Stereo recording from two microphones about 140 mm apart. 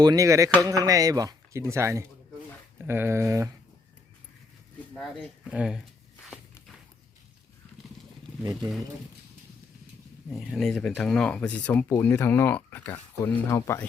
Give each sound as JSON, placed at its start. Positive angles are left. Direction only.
{"t": 0.0, "sound": "speech", "side_deg": -25}
{"t": 4.9, "sound": "speech", "side_deg": -5}
{"t": 10.2, "sound": "speech", "side_deg": 0}